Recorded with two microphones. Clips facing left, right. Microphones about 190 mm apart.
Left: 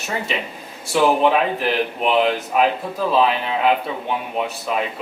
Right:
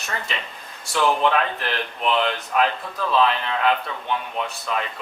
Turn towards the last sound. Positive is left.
turn(degrees=10)  # may be behind; listen again after turning